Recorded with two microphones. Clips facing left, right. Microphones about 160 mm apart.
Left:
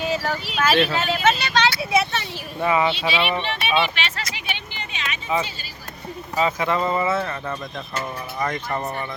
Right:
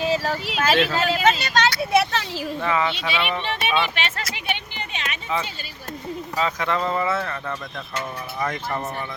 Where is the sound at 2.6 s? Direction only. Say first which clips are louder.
Left 4 dB; 15° left (ahead or behind).